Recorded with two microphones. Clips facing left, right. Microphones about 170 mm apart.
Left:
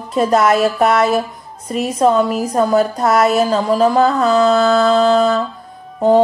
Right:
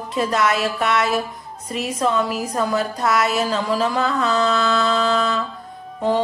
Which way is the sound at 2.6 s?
35° left (ahead or behind).